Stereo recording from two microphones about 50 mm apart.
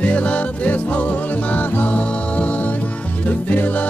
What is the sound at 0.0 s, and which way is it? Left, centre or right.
Music, left.